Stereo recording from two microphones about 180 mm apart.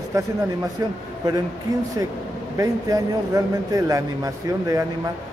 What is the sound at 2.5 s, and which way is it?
Speech, 20° right (ahead or behind).